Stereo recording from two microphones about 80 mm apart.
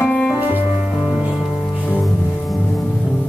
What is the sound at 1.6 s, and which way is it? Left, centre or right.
Music, left.